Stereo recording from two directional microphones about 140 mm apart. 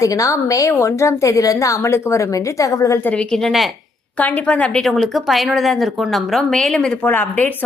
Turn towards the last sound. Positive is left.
turn(degrees=15)  # may be behind; listen again after turning